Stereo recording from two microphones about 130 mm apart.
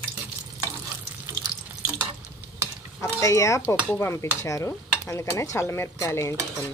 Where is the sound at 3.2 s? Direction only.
25° left (ahead or behind).